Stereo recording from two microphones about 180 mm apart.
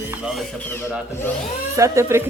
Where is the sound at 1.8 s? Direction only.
15° right (ahead or behind).